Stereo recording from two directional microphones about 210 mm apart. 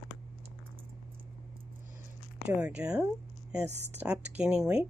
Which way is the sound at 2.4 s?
5° right (ahead or behind).